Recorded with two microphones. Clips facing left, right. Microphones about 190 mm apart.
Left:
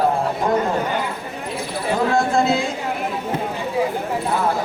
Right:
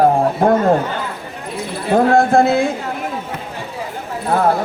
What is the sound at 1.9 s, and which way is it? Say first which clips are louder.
Speech: right 7 dB; 55° right (ahead or behind).